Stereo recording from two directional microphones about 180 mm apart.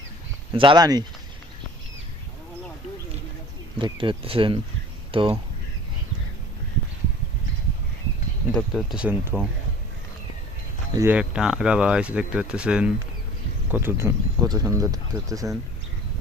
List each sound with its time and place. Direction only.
0.5 s speech: 25° right (ahead or behind)
3.8 s speech: 25° right (ahead or behind)
8.5 s speech: centre (ahead or behind)
11.1 s speech: 5° right (ahead or behind)